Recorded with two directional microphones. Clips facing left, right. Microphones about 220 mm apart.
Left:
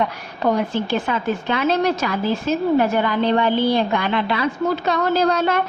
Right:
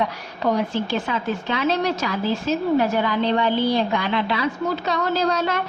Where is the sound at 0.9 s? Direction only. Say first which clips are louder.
Left 3 dB; 55° left (ahead or behind).